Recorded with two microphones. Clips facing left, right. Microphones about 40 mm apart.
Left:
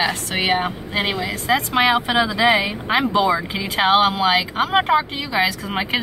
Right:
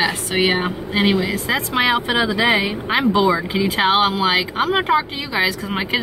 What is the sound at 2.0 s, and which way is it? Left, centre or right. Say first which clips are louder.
Speech: even; right.